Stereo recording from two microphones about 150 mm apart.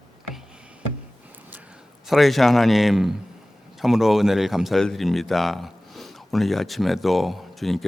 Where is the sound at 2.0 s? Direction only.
Centre (ahead or behind).